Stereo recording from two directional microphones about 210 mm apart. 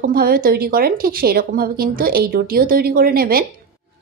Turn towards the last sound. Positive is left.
turn(degrees=-45)  # may be behind; listen again after turning